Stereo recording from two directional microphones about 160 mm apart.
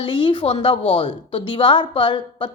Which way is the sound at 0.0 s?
30° left (ahead or behind).